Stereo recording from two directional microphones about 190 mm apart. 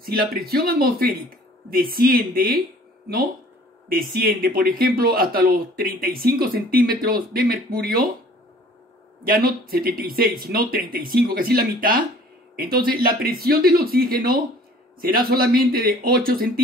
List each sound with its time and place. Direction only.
0.0 s speech: 55° right (ahead or behind)
3.9 s speech: 50° right (ahead or behind)
9.2 s speech: 50° right (ahead or behind)